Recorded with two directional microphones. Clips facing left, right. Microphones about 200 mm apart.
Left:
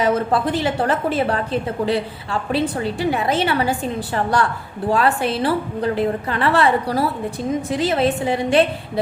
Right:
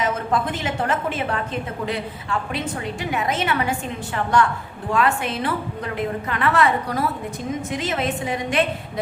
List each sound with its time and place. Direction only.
0.0 s a woman's voice: 35° left (ahead or behind)